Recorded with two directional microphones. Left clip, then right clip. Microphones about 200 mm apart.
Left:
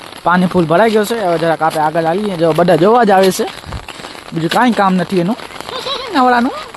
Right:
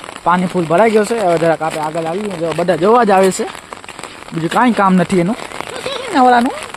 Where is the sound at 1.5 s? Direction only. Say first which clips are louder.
Left 5 dB; 20° left (ahead or behind).